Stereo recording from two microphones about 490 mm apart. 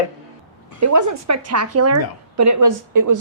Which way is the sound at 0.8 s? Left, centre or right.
Right.